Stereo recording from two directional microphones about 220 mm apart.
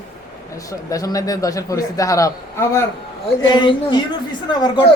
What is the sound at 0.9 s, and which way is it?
A woman's voice, 15° left (ahead or behind).